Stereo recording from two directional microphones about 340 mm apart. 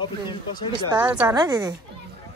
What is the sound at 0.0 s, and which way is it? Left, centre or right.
Speech, centre.